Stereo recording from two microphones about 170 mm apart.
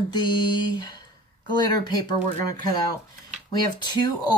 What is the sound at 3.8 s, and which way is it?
Speech, 25° left (ahead or behind).